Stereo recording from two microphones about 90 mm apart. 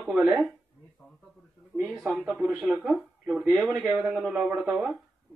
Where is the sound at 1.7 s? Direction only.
15° left (ahead or behind).